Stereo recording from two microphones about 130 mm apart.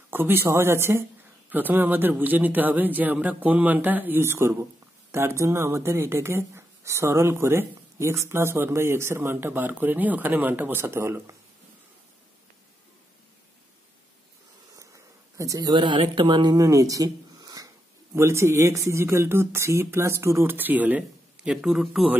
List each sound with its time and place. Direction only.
0.1 s a man's voice: 15° right (ahead or behind)
14.8 s insect: 25° right (ahead or behind)
16.0 s speech: 40° right (ahead or behind); by 22.1 s centre (ahead or behind)